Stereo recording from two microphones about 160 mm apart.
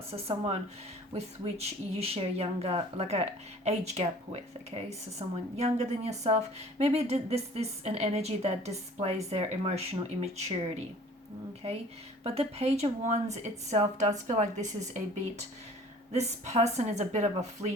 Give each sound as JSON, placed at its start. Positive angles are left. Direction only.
{"t": 0.1, "sound": "speech", "side_deg": -40}
{"t": 11.6, "sound": "a woman's voice", "side_deg": -35}
{"t": 16.1, "sound": "a woman's voice", "side_deg": -45}